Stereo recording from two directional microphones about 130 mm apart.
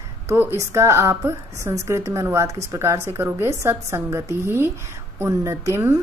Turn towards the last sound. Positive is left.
turn(degrees=-20)  # may be behind; listen again after turning